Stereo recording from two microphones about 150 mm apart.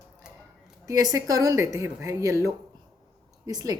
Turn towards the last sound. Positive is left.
turn(degrees=-25)  # may be behind; listen again after turning